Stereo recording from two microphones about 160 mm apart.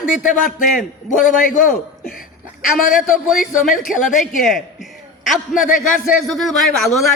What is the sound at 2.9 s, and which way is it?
A man's voice, 5° right (ahead or behind).